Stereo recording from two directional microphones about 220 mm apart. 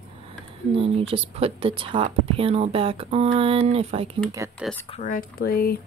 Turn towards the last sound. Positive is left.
turn(degrees=45)  # may be behind; listen again after turning